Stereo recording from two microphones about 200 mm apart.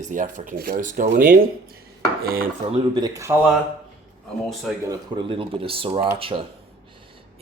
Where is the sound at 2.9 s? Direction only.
20° right (ahead or behind).